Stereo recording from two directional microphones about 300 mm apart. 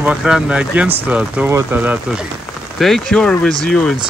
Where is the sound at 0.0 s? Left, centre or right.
Centre.